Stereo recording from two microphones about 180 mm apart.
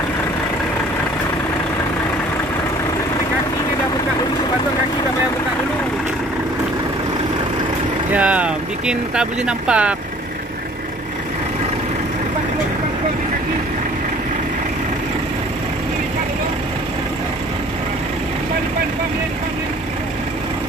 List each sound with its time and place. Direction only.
8.1 s vehicle: 5° right (ahead or behind)